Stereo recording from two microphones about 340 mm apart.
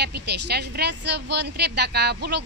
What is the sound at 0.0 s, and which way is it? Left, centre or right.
Speech, right.